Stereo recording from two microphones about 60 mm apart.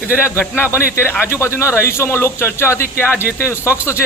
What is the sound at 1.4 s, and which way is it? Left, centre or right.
Speech, left.